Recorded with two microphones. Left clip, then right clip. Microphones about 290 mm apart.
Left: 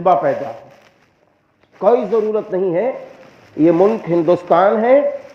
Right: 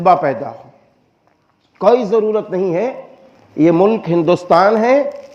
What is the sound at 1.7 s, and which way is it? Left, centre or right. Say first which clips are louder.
A man's voice: right 2 dB; right.